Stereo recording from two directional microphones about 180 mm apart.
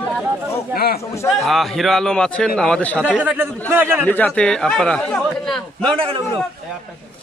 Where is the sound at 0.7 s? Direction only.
60° left (ahead or behind).